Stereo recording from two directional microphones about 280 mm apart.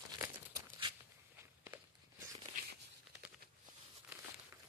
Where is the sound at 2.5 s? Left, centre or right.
Centre.